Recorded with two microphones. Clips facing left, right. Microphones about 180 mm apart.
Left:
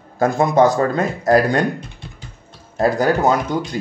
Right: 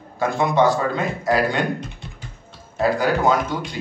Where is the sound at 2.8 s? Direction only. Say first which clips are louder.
Left 3 dB; 45° left (ahead or behind).